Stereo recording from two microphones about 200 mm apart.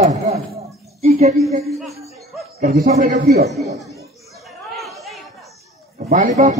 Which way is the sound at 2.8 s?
40° right (ahead or behind).